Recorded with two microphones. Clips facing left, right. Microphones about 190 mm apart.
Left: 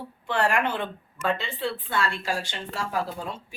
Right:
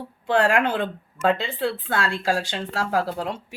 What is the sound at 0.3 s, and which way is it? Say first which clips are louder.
Speech: right 5 dB; 90° right.